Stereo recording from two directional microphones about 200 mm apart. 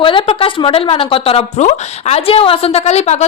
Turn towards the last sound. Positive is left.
turn(degrees=35)  # may be behind; listen again after turning